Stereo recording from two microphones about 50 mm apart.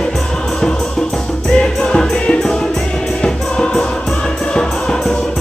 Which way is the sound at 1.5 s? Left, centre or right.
Centre.